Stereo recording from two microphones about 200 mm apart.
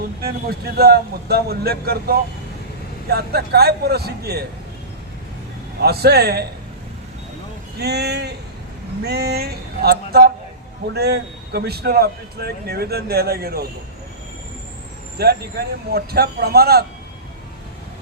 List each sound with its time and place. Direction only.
0.2 s a man's voice: 50° right (ahead or behind)
5.8 s a man's voice: 50° right (ahead or behind)
7.8 s speech: 55° right (ahead or behind)
9.0 s a sound: 55° right (ahead or behind)
10.9 s a man's voice: 55° right (ahead or behind)
15.2 s a man's voice: 50° right (ahead or behind)